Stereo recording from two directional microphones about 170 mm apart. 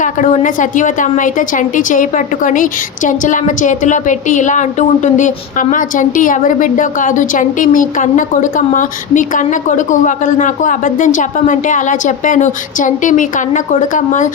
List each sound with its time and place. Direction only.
0.0 s a woman's voice: 50° left (ahead or behind)